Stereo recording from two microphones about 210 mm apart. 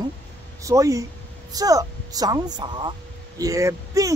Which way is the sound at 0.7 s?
15° right (ahead or behind).